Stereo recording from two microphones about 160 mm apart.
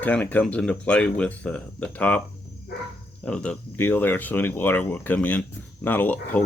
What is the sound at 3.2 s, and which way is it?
Speech, 5° left (ahead or behind).